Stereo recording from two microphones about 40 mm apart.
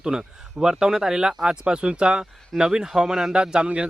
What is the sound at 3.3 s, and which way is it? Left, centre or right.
Speech, right.